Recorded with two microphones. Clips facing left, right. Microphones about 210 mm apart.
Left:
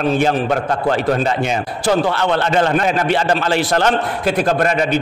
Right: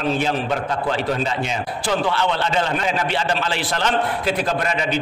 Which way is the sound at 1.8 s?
45° left (ahead or behind).